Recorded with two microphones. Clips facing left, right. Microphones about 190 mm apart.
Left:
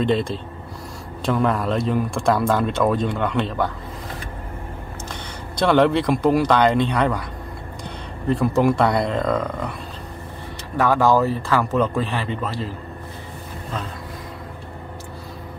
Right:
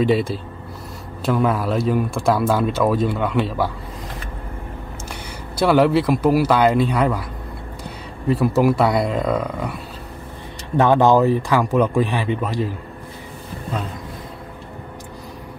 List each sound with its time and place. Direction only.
0.0 s speech: 5° right (ahead or behind)
5.6 s speech: 5° right (ahead or behind)
8.3 s speech: 5° right (ahead or behind)
10.8 s speech: 25° right (ahead or behind)